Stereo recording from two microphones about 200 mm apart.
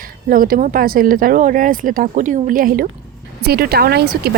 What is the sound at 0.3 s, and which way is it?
Speech, 45° right (ahead or behind).